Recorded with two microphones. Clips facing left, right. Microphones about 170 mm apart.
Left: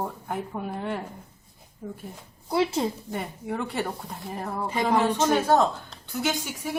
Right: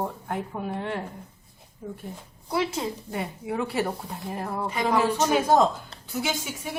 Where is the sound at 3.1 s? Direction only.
5° right (ahead or behind).